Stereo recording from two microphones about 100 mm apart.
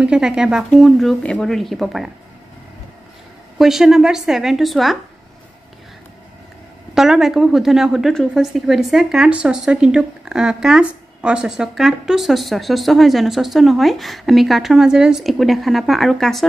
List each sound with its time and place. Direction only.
0.0 s speech: 5° right (ahead or behind)
3.5 s speech: 5° right (ahead or behind)
7.0 s speech: 5° right (ahead or behind)